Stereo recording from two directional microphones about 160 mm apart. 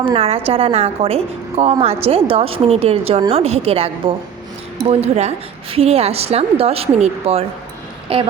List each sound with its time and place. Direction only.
0.1 s speech: 35° right (ahead or behind)